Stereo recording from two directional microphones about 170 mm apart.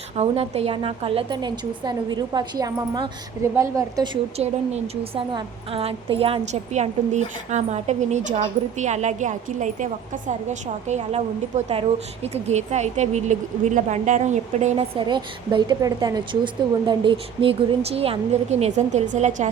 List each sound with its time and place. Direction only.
0.2 s a woman's voice: 35° right (ahead or behind)
14.9 s a woman's voice: 30° right (ahead or behind); by 19.5 s 45° right (ahead or behind)